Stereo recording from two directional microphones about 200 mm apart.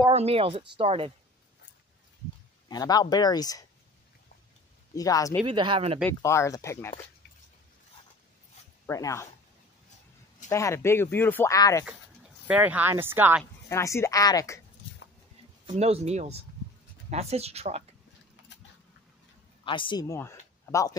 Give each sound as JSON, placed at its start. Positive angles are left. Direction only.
{"t": 0.1, "sound": "speech", "side_deg": -30}
{"t": 2.7, "sound": "speech", "side_deg": 20}
{"t": 4.9, "sound": "speech", "side_deg": 15}
{"t": 5.4, "sound": "speech", "side_deg": -25}
{"t": 6.0, "sound": "speech", "side_deg": 15}
{"t": 8.8, "sound": "speech", "side_deg": 15}
{"t": 10.5, "sound": "speech", "side_deg": 15}
{"t": 12.4, "sound": "speech", "side_deg": -10}
{"t": 13.7, "sound": "speech", "side_deg": 15}
{"t": 15.7, "sound": "speech", "side_deg": -35}
{"t": 19.6, "sound": "speech", "side_deg": 25}